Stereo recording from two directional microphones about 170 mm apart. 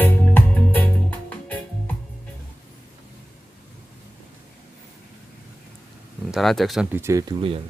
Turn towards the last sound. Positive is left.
turn(degrees=-20)  # may be behind; listen again after turning